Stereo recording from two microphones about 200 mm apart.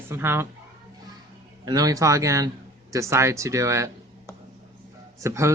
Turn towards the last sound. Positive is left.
turn(degrees=-15)  # may be behind; listen again after turning